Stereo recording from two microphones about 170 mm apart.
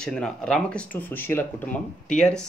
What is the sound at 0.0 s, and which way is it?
Speech, 5° left (ahead or behind).